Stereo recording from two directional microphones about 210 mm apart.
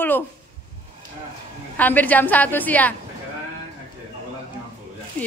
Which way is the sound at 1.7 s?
10° left (ahead or behind).